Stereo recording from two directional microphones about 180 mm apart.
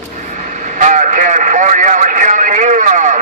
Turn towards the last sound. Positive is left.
turn(degrees=-45)  # may be behind; listen again after turning